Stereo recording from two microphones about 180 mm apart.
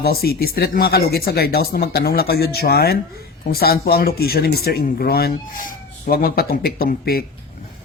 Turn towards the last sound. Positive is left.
turn(degrees=60)  # may be behind; listen again after turning